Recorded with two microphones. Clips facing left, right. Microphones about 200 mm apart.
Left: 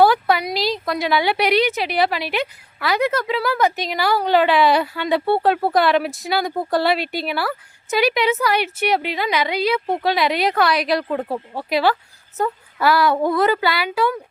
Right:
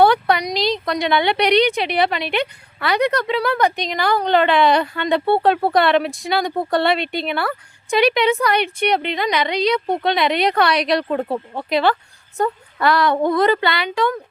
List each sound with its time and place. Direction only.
0.0 s a woman's voice: 5° left (ahead or behind)